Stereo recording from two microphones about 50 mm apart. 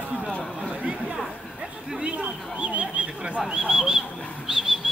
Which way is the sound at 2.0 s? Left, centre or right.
Right.